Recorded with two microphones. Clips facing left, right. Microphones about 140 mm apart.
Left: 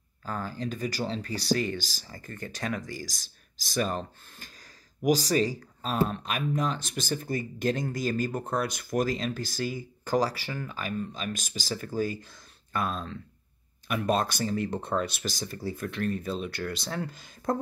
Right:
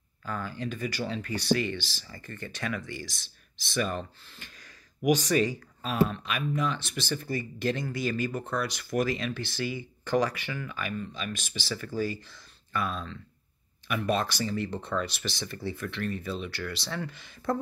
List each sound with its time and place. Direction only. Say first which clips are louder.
0.2 s speech: left 1 dB; 40° left (ahead or behind)